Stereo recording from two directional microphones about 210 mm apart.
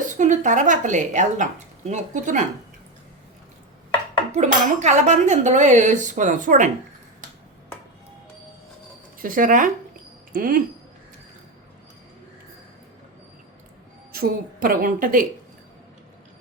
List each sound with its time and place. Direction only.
0.2 s speech: 35° right (ahead or behind)
4.3 s speech: 35° right (ahead or behind)
9.1 s a sound: 40° right (ahead or behind)
14.1 s speech: 45° right (ahead or behind)